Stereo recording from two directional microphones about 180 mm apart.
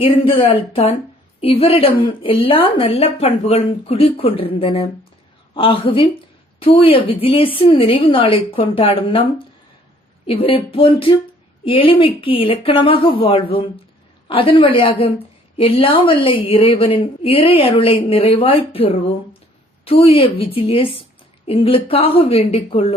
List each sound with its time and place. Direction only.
0.0 s a woman's voice: 30° left (ahead or behind)
10.2 s a woman's voice: 30° left (ahead or behind)